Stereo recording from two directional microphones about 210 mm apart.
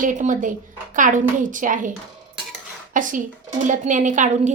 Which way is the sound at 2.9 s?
40° right (ahead or behind).